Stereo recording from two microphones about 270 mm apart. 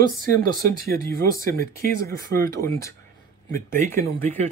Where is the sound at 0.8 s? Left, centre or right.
Centre.